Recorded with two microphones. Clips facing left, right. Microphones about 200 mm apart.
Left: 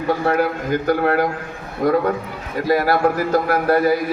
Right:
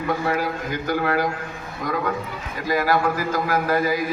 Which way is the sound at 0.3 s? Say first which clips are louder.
Left 6 dB; 55° left (ahead or behind).